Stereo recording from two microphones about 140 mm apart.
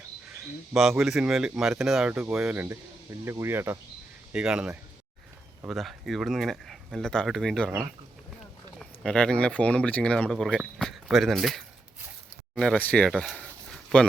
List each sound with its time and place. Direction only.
0.7 s speech: 5° right (ahead or behind)
8.8 s speech: 5° left (ahead or behind)
13.1 s a sound: 5° left (ahead or behind)